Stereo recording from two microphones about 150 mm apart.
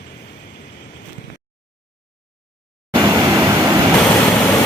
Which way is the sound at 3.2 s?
20° right (ahead or behind).